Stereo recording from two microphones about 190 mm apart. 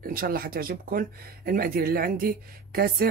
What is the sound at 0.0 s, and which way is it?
Speech, 50° right (ahead or behind).